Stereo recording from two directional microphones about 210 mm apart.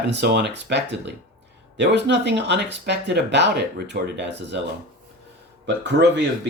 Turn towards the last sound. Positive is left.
turn(degrees=-55)  # may be behind; listen again after turning